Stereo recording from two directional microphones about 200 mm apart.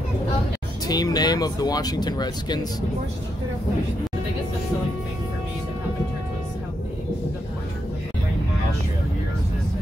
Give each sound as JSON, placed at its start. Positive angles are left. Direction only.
{"t": 0.8, "sound": "speech", "side_deg": 20}